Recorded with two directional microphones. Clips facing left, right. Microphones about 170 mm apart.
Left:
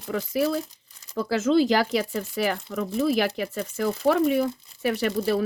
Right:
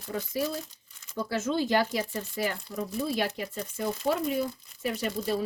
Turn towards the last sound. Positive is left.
turn(degrees=80)